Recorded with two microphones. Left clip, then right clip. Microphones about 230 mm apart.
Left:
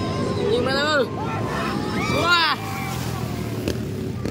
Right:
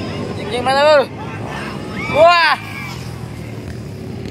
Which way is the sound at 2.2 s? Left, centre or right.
Centre.